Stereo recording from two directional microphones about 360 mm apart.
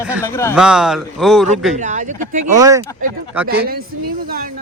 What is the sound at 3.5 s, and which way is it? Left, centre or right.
Speech, right.